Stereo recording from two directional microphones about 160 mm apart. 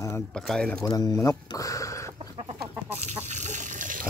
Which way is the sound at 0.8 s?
25° left (ahead or behind).